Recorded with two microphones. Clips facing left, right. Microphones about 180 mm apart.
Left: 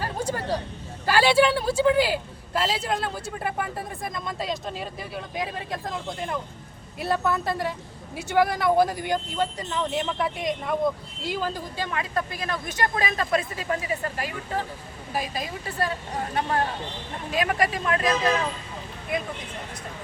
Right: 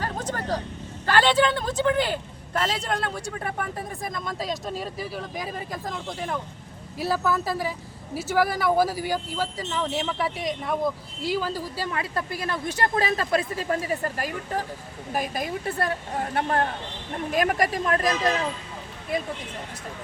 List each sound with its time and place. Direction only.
0.0 s vehicle: 10° left (ahead or behind)
1.0 s speech: 10° left (ahead or behind)
11.9 s speech: 30° right (ahead or behind)
15.1 s speech: 55° right (ahead or behind)
17.3 s speech: 45° right (ahead or behind)